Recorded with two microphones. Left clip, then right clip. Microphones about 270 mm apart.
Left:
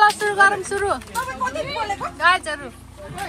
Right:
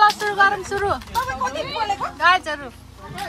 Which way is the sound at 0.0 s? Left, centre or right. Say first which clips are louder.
Left 1 dB; centre.